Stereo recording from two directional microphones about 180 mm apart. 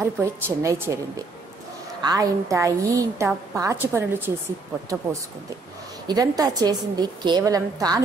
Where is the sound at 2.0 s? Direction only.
20° right (ahead or behind).